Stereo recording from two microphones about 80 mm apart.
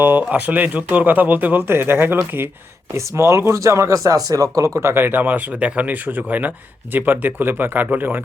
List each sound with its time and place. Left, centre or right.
0.0 s speech: right
2.9 s speech: right